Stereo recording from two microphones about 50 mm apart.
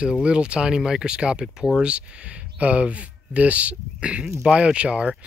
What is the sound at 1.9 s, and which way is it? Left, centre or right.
Speech, right.